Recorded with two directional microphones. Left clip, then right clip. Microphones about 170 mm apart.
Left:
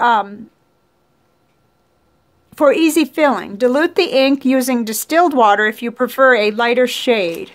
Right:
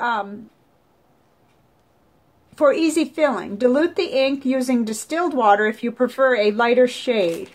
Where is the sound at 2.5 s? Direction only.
45° left (ahead or behind).